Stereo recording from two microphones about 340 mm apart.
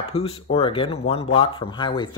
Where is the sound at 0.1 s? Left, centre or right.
Centre.